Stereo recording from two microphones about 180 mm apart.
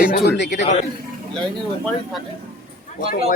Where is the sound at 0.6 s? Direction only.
40° left (ahead or behind).